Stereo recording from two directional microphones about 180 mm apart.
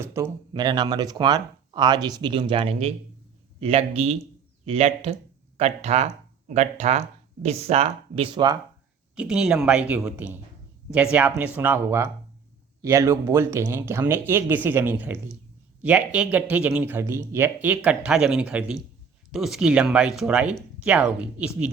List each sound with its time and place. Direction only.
0.0 s speech: 15° right (ahead or behind)
9.1 s speech: 5° right (ahead or behind)